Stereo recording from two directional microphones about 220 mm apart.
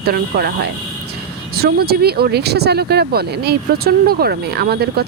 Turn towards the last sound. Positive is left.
turn(degrees=-45)  # may be behind; listen again after turning